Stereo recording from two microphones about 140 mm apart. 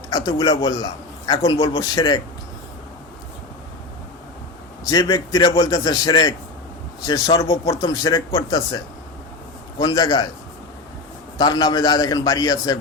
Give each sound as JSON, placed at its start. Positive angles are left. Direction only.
{"t": 0.1, "sound": "a man's voice", "side_deg": 30}
{"t": 4.9, "sound": "a man's voice", "side_deg": 30}
{"t": 11.3, "sound": "a man's voice", "side_deg": 30}